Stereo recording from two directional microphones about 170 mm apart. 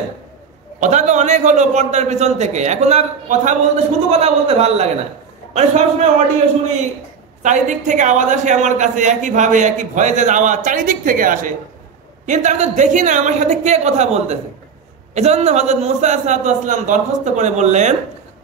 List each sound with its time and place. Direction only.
0.7 s a man's voice: 45° right (ahead or behind)
7.4 s a man's voice: 45° right (ahead or behind)